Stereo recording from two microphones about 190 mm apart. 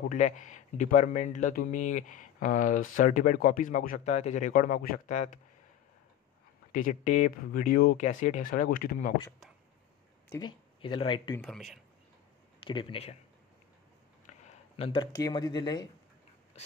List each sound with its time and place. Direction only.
0.1 s speech: 40° left (ahead or behind)
6.7 s speech: 40° left (ahead or behind)
10.3 s speech: 25° left (ahead or behind)
11.3 s speech: 5° left (ahead or behind)
12.5 s speech: 25° left (ahead or behind)
14.8 s speech: 25° left (ahead or behind)